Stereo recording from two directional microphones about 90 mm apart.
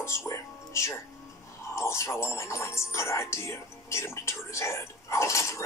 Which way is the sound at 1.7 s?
30° left (ahead or behind).